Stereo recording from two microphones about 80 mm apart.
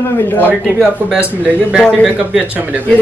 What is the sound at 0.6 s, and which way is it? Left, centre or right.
Speech, centre.